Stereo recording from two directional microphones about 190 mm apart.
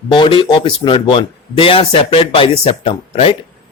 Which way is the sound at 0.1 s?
25° left (ahead or behind).